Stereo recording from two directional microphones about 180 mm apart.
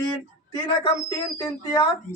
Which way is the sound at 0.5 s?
30° left (ahead or behind).